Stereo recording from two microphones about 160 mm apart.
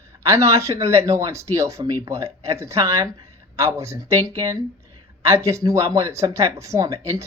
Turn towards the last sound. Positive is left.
turn(degrees=-20)  # may be behind; listen again after turning